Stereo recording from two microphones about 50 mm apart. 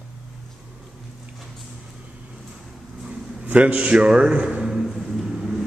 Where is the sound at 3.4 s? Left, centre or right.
Right; by 4.9 s centre.